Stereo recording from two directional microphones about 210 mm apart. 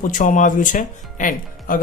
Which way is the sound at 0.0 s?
40° left (ahead or behind).